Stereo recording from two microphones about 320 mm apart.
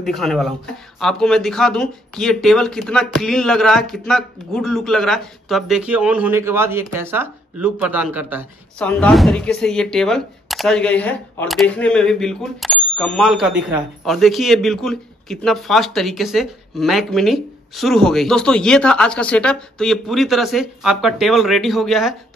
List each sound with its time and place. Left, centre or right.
0.0 s speech: centre